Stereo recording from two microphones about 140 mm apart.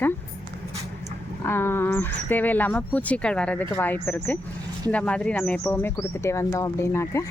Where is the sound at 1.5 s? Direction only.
15° left (ahead or behind).